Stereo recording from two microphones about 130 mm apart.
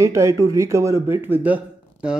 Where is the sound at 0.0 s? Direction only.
25° right (ahead or behind).